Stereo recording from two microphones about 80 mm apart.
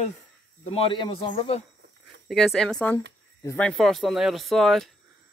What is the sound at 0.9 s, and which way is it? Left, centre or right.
Speech, left.